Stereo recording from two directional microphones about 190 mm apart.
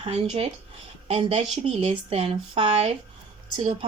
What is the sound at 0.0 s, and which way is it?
Speech, 30° right (ahead or behind).